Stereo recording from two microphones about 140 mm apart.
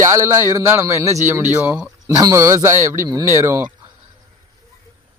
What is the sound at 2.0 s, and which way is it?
A man's voice, 20° right (ahead or behind).